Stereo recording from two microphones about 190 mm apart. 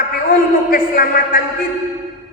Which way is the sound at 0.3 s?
45° left (ahead or behind).